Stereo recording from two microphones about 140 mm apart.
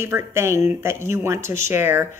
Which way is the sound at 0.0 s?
20° right (ahead or behind).